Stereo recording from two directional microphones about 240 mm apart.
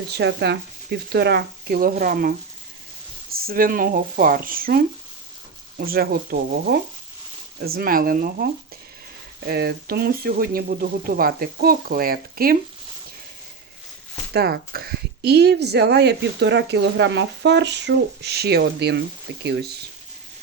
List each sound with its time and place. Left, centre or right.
0.2 s speech: right
3.3 s speech: right
5.8 s speech: right
9.5 s speech: right
14.3 s speech: right